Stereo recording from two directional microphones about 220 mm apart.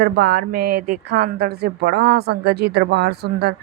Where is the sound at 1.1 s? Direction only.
45° right (ahead or behind).